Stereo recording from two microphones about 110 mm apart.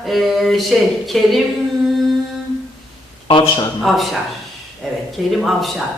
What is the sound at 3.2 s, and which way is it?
Speech, 50° left (ahead or behind).